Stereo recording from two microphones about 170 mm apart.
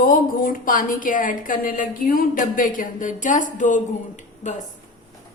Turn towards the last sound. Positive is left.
turn(degrees=45)  # may be behind; listen again after turning